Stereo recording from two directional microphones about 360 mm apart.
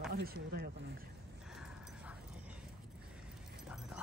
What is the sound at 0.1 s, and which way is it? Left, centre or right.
Speech, right.